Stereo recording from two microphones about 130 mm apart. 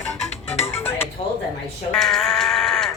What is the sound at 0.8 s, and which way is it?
Music, 15° left (ahead or behind).